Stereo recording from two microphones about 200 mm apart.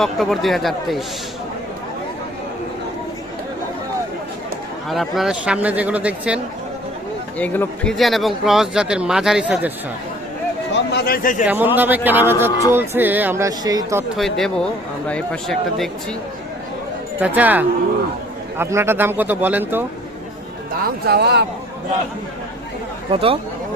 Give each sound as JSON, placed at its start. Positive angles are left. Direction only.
{"t": 0.0, "sound": "speech", "side_deg": 0}
{"t": 4.9, "sound": "speech", "side_deg": 0}
{"t": 7.3, "sound": "speech", "side_deg": 10}
{"t": 10.9, "sound": "speech", "side_deg": 50}
{"t": 11.4, "sound": "speech", "side_deg": -10}
{"t": 14.2, "sound": "speech", "side_deg": 0}
{"t": 17.2, "sound": "speech", "side_deg": -5}
{"t": 20.8, "sound": "speech", "side_deg": -55}
{"t": 23.1, "sound": "speech", "side_deg": -25}